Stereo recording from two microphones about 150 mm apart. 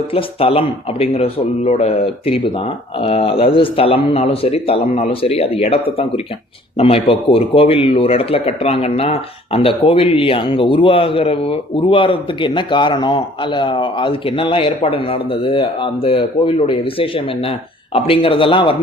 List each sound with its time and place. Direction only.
0.1 s a man's voice: 40° left (ahead or behind)